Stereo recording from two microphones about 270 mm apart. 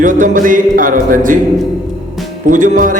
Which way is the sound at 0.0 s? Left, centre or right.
Right.